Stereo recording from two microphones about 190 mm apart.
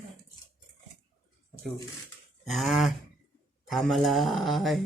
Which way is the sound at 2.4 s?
Centre (ahead or behind).